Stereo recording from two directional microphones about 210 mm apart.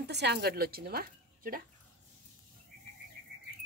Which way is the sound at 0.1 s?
50° right (ahead or behind).